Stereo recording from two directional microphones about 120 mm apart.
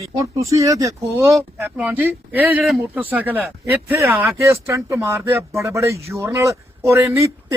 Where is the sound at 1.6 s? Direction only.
15° right (ahead or behind).